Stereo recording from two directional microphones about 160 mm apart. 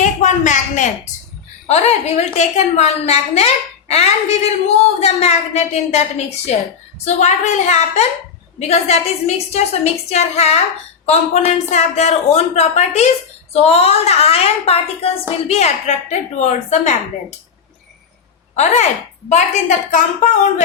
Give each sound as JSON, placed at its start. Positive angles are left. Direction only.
{"t": 0.0, "sound": "a sound", "side_deg": 50}
{"t": 1.6, "sound": "a woman's voice", "side_deg": 40}
{"t": 18.5, "sound": "a woman's voice", "side_deg": 45}